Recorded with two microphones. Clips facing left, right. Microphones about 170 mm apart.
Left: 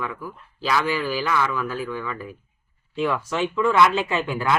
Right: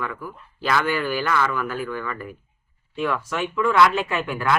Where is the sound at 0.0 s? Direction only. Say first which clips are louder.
Even; 5° left (ahead or behind).